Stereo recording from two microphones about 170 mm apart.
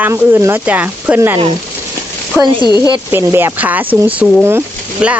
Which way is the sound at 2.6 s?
25° left (ahead or behind).